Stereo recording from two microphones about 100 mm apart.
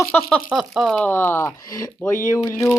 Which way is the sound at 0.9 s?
20° left (ahead or behind).